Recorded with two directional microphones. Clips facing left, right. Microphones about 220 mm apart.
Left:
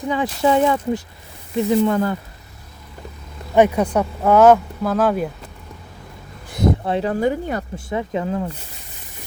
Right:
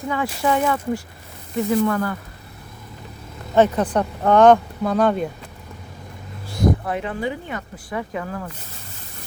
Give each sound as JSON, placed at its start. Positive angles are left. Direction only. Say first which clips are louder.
{"t": 0.1, "sound": "speech", "louder": "left 4 dB", "side_deg": 20}
{"t": 3.5, "sound": "speech", "louder": "left 2 dB", "side_deg": 10}
{"t": 6.5, "sound": "vehicle", "louder": "left 1 dB", "side_deg": 25}
{"t": 7.1, "sound": "speech", "louder": "left 6 dB", "side_deg": 45}
{"t": 7.9, "sound": "speech", "louder": "left 4 dB", "side_deg": 25}